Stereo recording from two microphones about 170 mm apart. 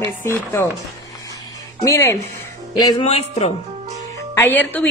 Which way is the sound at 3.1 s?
40° left (ahead or behind).